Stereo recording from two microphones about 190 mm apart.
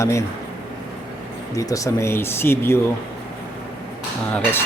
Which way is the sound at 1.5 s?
15° left (ahead or behind).